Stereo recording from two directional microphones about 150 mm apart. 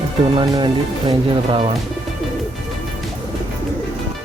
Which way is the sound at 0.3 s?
30° right (ahead or behind).